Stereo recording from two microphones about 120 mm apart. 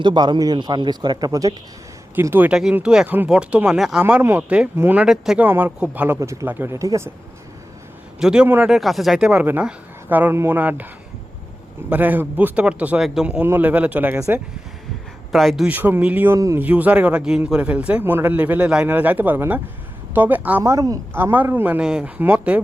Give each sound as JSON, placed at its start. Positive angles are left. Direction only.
{"t": 0.0, "sound": "a man's voice", "side_deg": -40}
{"t": 2.2, "sound": "a man's voice", "side_deg": -20}
{"t": 2.5, "sound": "a man's voice", "side_deg": -5}
{"t": 4.0, "sound": "a man's voice", "side_deg": -20}
{"t": 5.5, "sound": "a man's voice", "side_deg": -15}
{"t": 6.1, "sound": "speech", "side_deg": -25}
{"t": 8.2, "sound": "a man's voice", "side_deg": -5}
{"t": 11.9, "sound": "a man's voice", "side_deg": -15}
{"t": 15.3, "sound": "speech", "side_deg": 0}
{"t": 15.7, "sound": "a man's voice", "side_deg": -15}
{"t": 16.6, "sound": "a man's voice", "side_deg": -10}
{"t": 21.2, "sound": "a man's voice", "side_deg": -15}